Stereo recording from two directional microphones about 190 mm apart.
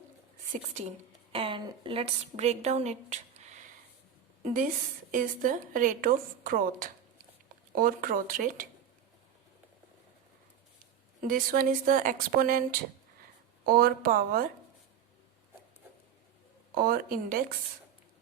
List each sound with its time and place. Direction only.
0.5 s a woman's voice: 35° right (ahead or behind)
5.1 s a woman's voice: 45° right (ahead or behind)
11.2 s a woman's voice: 45° right (ahead or behind)
13.7 s a woman's voice: 50° right (ahead or behind)
16.7 s a woman's voice: 50° right (ahead or behind)